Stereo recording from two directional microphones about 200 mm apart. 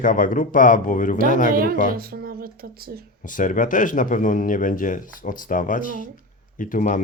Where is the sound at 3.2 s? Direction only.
40° left (ahead or behind).